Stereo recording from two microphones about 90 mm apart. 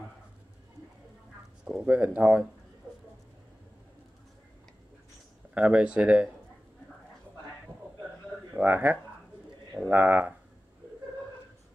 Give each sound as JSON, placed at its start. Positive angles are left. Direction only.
{"t": 1.6, "sound": "speech", "side_deg": -5}
{"t": 1.9, "sound": "speech", "side_deg": -20}
{"t": 5.5, "sound": "speech", "side_deg": -15}
{"t": 8.5, "sound": "speech", "side_deg": -20}